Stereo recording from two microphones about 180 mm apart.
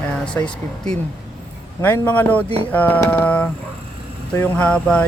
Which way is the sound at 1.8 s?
10° left (ahead or behind).